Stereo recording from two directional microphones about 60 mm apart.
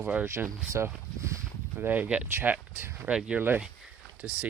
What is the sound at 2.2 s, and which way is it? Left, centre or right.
Speech, right.